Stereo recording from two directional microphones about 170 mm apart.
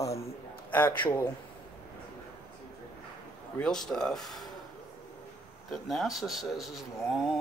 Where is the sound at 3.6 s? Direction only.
5° left (ahead or behind).